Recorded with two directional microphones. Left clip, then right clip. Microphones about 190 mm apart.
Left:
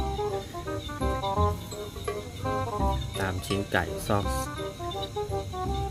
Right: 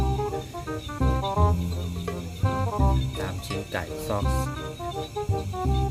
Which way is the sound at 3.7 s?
30° left (ahead or behind).